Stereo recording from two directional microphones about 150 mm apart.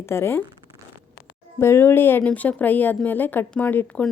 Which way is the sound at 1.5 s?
15° left (ahead or behind).